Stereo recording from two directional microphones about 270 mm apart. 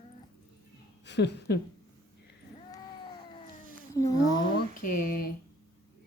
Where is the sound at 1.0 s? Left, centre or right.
Left.